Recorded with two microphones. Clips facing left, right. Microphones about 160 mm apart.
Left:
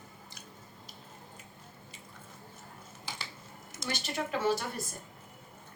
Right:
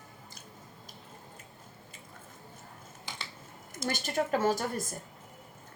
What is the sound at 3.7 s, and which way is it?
Speech, 50° right (ahead or behind).